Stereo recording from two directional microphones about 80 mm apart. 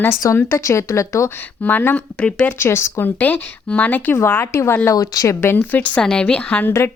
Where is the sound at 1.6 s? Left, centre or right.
Left.